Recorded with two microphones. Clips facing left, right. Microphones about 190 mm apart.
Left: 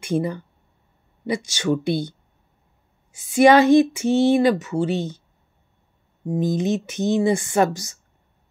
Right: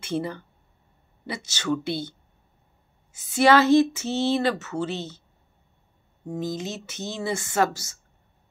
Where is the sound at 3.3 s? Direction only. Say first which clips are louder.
Left 4 dB; 15° left (ahead or behind).